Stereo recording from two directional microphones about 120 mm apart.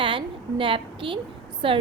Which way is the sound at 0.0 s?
45° right (ahead or behind).